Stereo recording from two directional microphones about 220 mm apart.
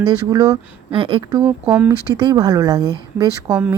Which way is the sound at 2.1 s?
20° right (ahead or behind).